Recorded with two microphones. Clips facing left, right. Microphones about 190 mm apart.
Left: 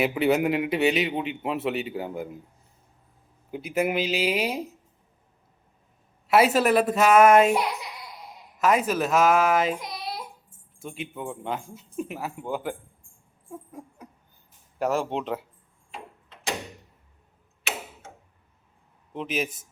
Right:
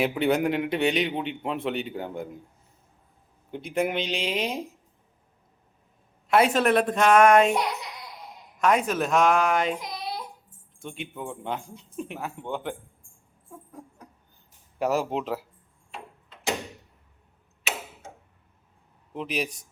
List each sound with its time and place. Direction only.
0.0 s a man's voice: 5° left (ahead or behind)
3.5 s a man's voice: 5° left (ahead or behind)
6.2 s a man's voice: 5° left (ahead or behind)
14.8 s a man's voice: 5° right (ahead or behind)
19.1 s a man's voice: centre (ahead or behind)